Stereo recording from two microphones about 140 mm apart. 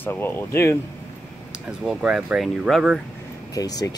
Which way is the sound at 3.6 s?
25° left (ahead or behind).